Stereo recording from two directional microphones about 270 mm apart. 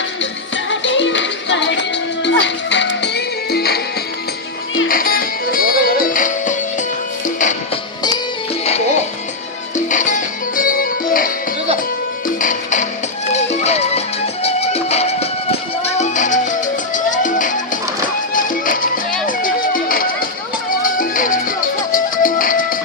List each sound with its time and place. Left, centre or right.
0.2 s music: left
4.9 s music: left
8.6 s music: left
12.4 s music: left